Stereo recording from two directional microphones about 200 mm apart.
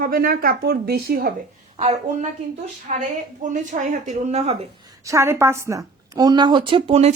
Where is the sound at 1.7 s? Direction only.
35° right (ahead or behind).